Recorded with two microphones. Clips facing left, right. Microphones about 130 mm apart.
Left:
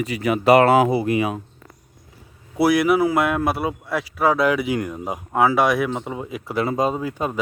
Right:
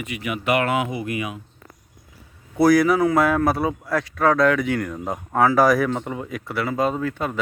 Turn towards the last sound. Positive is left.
turn(degrees=15)  # may be behind; listen again after turning